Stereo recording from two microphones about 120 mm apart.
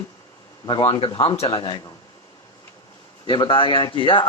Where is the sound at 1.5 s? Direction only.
35° left (ahead or behind).